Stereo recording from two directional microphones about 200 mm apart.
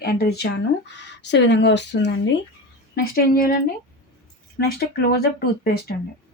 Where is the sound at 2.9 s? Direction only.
50° left (ahead or behind).